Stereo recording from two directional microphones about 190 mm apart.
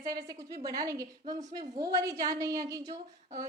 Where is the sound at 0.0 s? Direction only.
20° right (ahead or behind).